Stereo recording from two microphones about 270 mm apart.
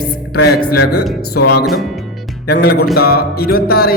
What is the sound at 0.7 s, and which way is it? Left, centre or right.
Speech, left.